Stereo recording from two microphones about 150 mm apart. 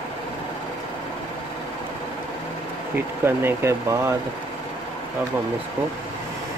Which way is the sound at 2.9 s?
15° right (ahead or behind).